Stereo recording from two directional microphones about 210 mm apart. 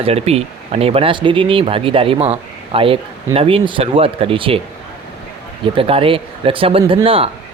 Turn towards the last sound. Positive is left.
turn(degrees=-25)  # may be behind; listen again after turning